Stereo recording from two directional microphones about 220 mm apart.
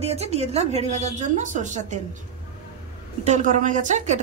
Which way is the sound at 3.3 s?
35° right (ahead or behind).